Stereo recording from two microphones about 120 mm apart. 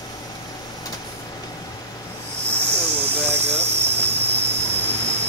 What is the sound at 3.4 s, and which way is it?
Vehicle, 60° right (ahead or behind).